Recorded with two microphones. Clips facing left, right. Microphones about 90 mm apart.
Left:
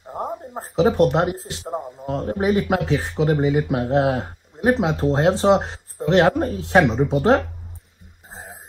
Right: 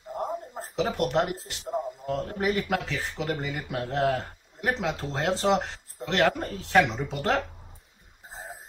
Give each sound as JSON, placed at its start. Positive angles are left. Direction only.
{"t": 0.6, "sound": "speech", "side_deg": 35}